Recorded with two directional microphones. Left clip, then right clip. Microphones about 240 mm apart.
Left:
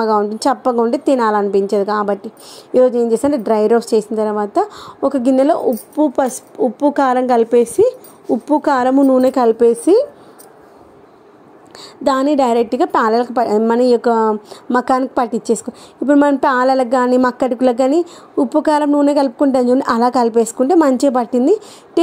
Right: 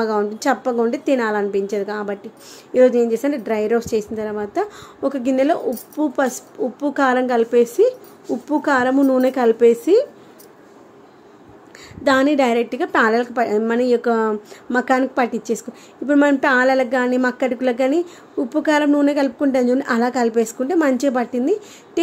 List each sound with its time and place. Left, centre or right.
0.0 s a woman's voice: left
11.8 s a woman's voice: centre